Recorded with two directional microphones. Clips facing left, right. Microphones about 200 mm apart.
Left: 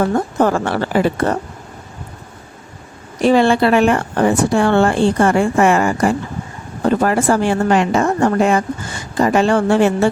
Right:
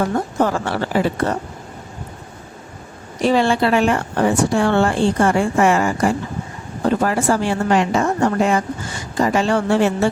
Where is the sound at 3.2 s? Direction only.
55° left (ahead or behind).